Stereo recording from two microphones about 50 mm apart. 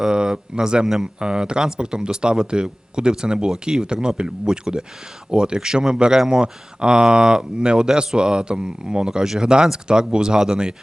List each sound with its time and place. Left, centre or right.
0.0 s speech: centre